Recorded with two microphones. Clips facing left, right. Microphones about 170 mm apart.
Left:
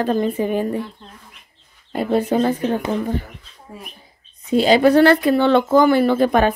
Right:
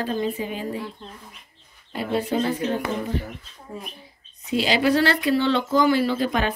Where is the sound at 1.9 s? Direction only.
45° left (ahead or behind).